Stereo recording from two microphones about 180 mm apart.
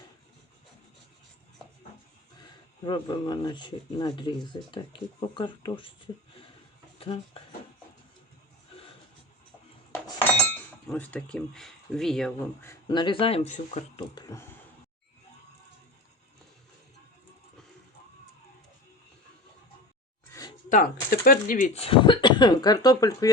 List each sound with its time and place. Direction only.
2.4 s speech: 25° left (ahead or behind)
9.9 s dishes: 10° left (ahead or behind)
12.9 s speech: 25° left (ahead or behind)
14.2 s speech: 20° left (ahead or behind)
20.7 s speech: 50° left (ahead or behind)
21.7 s speech: 30° left (ahead or behind)